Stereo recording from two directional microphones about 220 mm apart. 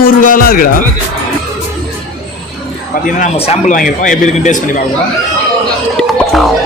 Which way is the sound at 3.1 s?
30° left (ahead or behind).